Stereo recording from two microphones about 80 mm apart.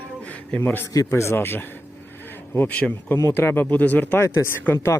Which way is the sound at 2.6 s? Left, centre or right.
Centre.